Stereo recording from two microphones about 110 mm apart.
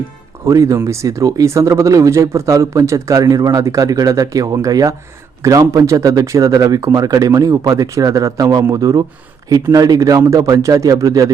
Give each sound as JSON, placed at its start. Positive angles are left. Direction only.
{"t": 0.4, "sound": "speech", "side_deg": -30}